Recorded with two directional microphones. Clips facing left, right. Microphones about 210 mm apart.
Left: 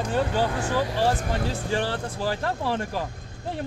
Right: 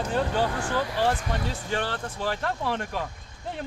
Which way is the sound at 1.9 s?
10° left (ahead or behind).